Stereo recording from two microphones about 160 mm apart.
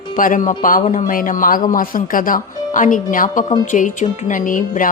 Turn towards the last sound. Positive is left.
turn(degrees=55)  # may be behind; listen again after turning